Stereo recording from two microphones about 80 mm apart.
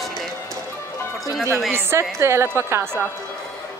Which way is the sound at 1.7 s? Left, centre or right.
Right.